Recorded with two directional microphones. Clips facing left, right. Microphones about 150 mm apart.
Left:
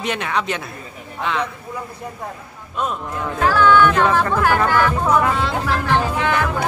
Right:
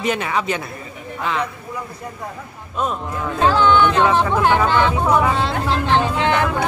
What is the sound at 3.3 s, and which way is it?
Speech, 20° right (ahead or behind).